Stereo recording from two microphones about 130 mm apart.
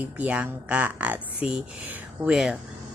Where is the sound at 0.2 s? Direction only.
10° right (ahead or behind).